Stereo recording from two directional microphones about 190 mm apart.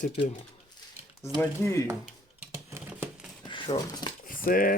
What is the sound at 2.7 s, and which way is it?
Patter, 10° right (ahead or behind).